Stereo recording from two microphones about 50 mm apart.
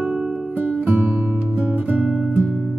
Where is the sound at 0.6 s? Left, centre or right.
Right.